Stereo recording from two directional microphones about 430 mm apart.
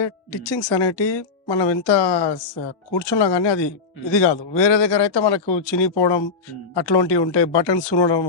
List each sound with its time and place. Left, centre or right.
0.0 s speech: left